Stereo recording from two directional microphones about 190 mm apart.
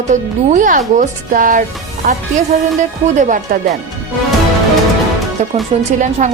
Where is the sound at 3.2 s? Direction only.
45° right (ahead or behind).